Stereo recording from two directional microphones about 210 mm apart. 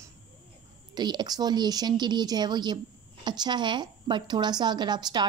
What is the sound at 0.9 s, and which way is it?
A woman's voice, 20° right (ahead or behind).